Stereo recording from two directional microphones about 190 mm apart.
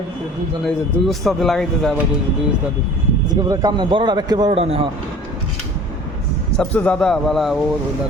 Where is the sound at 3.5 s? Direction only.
20° right (ahead or behind).